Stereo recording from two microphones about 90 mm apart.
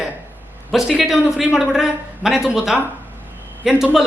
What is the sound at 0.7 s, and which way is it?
A man's voice, 5° right (ahead or behind).